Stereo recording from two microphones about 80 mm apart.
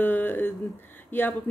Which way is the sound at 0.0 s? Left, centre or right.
Left.